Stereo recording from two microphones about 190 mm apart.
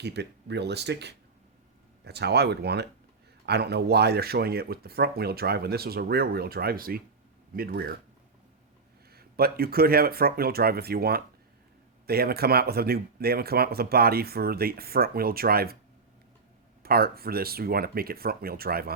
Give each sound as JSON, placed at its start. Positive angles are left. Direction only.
{"t": 0.0, "sound": "speech", "side_deg": -60}
{"t": 9.1, "sound": "speech", "side_deg": -55}
{"t": 16.8, "sound": "speech", "side_deg": -55}